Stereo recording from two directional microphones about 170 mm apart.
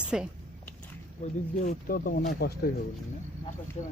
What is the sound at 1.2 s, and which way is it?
Speech, 55° left (ahead or behind).